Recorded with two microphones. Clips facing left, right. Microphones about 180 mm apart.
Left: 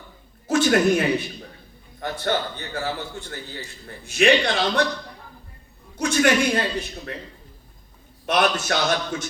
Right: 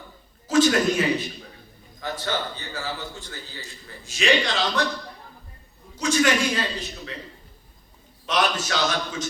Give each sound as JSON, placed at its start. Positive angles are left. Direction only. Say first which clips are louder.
{"t": 0.4, "sound": "a sound", "louder": "left 1 dB", "side_deg": 55}
{"t": 2.0, "sound": "a man's voice", "louder": "left 4 dB", "side_deg": 60}
{"t": 6.0, "sound": "a man's voice", "louder": "left 2 dB", "side_deg": 60}
{"t": 8.3, "sound": "a man's voice", "louder": "left 3 dB", "side_deg": 55}